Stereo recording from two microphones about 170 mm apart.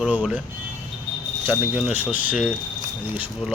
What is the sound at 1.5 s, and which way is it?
Speech, 10° right (ahead or behind).